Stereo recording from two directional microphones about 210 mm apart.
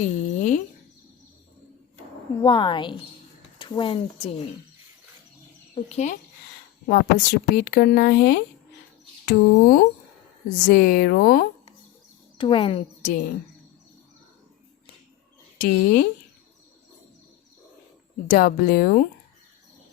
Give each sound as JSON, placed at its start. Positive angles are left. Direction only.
{"t": 0.0, "sound": "a sound", "side_deg": 40}
{"t": 2.4, "sound": "a woman's voice", "side_deg": 20}
{"t": 5.7, "sound": "speech", "side_deg": 30}
{"t": 6.8, "sound": "speech", "side_deg": 45}
{"t": 12.4, "sound": "a woman's voice", "side_deg": 25}
{"t": 15.5, "sound": "speech", "side_deg": 45}
{"t": 18.3, "sound": "speech", "side_deg": 45}